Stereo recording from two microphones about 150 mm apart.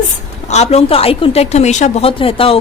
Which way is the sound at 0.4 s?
50° left (ahead or behind).